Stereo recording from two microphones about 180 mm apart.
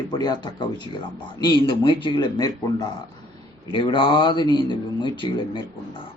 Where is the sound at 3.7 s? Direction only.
25° left (ahead or behind).